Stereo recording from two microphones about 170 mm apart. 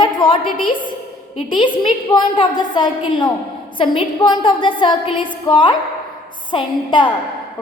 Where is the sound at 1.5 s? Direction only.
30° left (ahead or behind).